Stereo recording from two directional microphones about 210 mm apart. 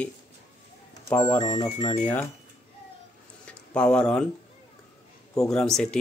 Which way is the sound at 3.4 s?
5° left (ahead or behind).